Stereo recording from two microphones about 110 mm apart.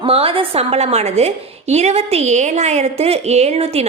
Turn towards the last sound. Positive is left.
turn(degrees=-70)  # may be behind; listen again after turning